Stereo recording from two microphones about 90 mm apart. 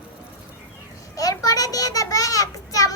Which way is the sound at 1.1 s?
40° left (ahead or behind).